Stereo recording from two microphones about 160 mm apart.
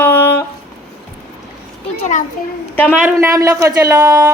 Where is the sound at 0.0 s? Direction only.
15° left (ahead or behind).